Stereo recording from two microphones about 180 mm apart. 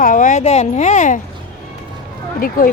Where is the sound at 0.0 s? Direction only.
45° left (ahead or behind).